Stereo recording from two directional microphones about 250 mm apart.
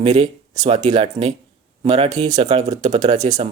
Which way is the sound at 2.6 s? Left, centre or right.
Centre.